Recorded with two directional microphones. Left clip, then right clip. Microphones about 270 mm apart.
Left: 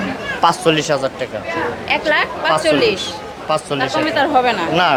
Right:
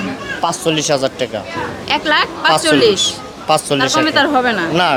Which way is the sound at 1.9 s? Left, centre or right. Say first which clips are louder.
Right 2 dB; right.